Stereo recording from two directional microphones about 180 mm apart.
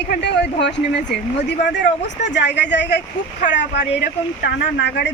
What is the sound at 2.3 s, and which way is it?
Speech, 75° left (ahead or behind).